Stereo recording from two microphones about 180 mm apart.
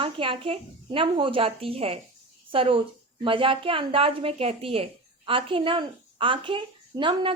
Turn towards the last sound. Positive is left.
turn(degrees=-30)  # may be behind; listen again after turning